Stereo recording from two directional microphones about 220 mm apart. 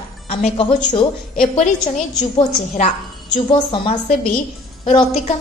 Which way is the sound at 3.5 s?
20° left (ahead or behind).